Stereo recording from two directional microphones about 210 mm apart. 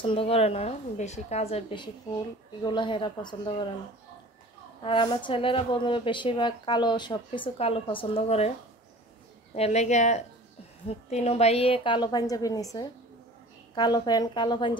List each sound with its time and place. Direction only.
0.0 s speech: 25° left (ahead or behind)
4.8 s speech: 25° left (ahead or behind)
9.6 s speech: 30° left (ahead or behind)